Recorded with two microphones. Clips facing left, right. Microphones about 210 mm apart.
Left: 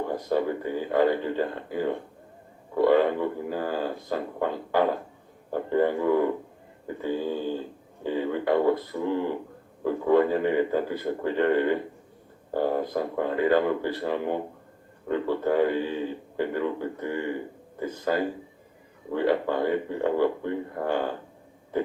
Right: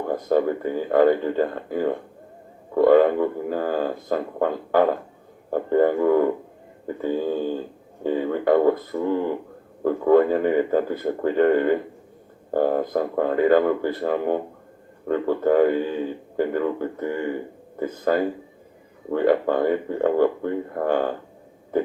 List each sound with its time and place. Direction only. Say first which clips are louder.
0.3 s speech: right 6 dB; 50° right (ahead or behind)